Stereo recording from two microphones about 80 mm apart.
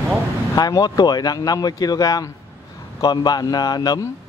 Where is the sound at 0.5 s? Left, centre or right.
Left.